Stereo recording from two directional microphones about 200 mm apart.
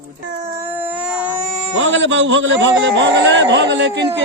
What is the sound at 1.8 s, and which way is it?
A man's voice, 70° right (ahead or behind).